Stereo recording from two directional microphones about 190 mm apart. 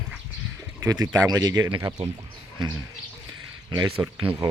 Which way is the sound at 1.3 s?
20° right (ahead or behind).